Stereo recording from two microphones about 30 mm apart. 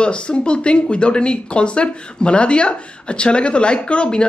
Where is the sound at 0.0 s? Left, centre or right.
Left.